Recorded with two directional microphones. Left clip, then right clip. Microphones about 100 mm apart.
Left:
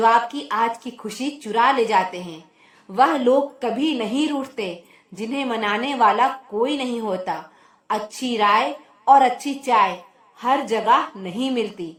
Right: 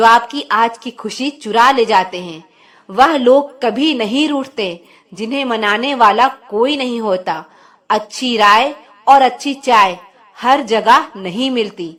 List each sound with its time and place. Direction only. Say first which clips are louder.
0.3 s a woman's voice: right 8 dB; 40° right (ahead or behind)